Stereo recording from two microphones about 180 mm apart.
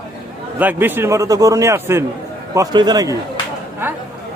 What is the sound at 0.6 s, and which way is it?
A man's voice, 10° right (ahead or behind).